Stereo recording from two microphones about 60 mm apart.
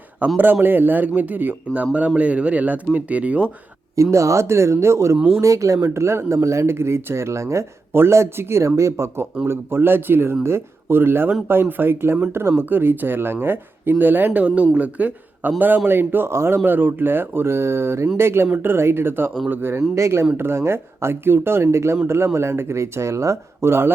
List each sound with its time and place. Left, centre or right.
0.2 s speech: right
3.9 s speech: right
9.5 s speech: right
16.6 s speech: right
20.0 s speech: right